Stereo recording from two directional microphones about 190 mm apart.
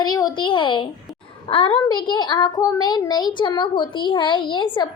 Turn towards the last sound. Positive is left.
turn(degrees=25)  # may be behind; listen again after turning